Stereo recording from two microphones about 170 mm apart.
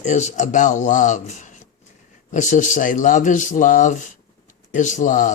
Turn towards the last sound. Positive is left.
turn(degrees=50)  # may be behind; listen again after turning